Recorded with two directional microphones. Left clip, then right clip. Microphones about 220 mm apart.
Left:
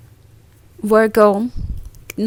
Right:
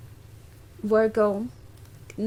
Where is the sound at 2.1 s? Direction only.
35° left (ahead or behind).